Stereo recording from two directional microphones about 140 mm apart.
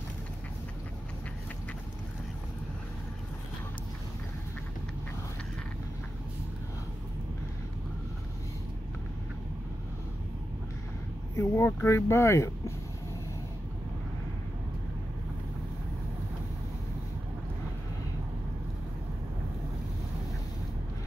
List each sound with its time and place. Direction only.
11.3 s speech: 20° left (ahead or behind)